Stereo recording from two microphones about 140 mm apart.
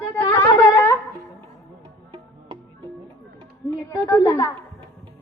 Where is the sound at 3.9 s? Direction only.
20° left (ahead or behind).